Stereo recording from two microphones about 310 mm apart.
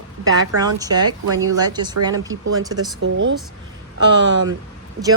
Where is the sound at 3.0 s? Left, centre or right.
Right.